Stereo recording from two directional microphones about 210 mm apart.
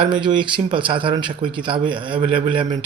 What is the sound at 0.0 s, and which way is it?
Speech, 25° right (ahead or behind).